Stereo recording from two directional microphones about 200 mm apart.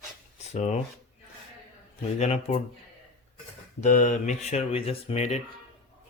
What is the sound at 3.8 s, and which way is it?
Speech, 40° left (ahead or behind).